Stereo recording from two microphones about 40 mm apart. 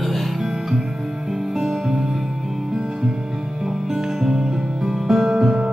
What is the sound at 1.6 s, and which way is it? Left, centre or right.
Music, centre.